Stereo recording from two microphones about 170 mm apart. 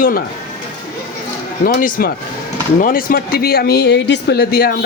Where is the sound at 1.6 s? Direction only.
55° left (ahead or behind).